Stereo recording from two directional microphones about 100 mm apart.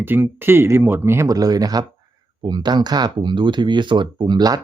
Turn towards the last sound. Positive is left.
turn(degrees=-45)  # may be behind; listen again after turning